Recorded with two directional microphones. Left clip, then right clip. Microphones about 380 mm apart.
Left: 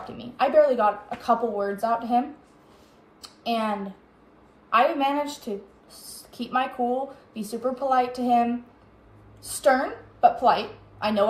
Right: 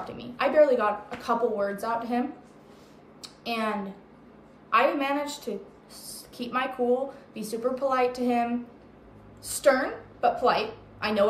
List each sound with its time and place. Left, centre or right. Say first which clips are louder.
0.2 s a woman's voice: left 2 dB; centre
3.2 s a sound: left 4 dB; centre
4.6 s a woman's voice: left 2 dB; centre
9.5 s a woman's voice: left 1 dB; centre